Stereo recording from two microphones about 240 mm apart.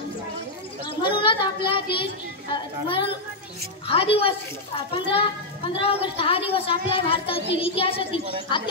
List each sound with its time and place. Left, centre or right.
0.8 s child singing: centre
2.5 s a child's voice: centre